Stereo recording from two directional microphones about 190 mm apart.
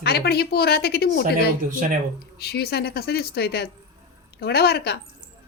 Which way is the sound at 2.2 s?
55° left (ahead or behind).